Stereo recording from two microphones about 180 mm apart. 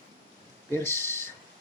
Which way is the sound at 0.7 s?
15° left (ahead or behind).